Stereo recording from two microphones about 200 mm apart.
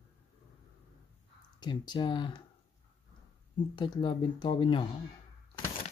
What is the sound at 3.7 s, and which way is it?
Speech, 25° left (ahead or behind).